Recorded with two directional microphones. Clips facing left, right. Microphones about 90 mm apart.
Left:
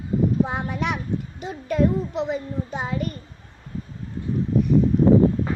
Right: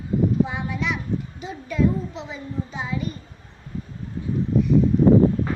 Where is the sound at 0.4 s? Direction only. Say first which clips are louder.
Left 1 dB; 50° left (ahead or behind).